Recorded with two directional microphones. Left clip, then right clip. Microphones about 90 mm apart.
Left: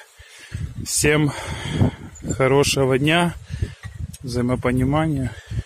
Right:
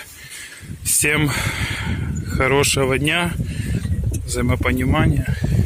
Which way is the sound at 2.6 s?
40° left (ahead or behind).